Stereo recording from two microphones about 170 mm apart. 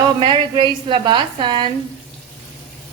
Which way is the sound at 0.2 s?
30° right (ahead or behind).